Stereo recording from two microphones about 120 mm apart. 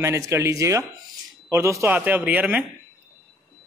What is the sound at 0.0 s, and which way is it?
A man's voice, 25° right (ahead or behind).